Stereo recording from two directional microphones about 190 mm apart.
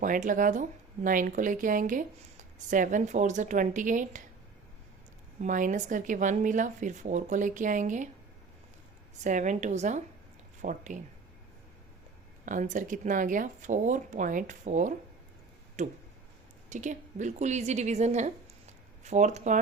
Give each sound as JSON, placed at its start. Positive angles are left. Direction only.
{"t": 0.0, "sound": "speech", "side_deg": -45}
{"t": 5.4, "sound": "speech", "side_deg": -45}
{"t": 9.2, "sound": "speech", "side_deg": -40}
{"t": 12.5, "sound": "speech", "side_deg": -40}